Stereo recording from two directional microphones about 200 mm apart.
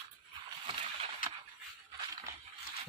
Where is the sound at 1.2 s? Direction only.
45° left (ahead or behind).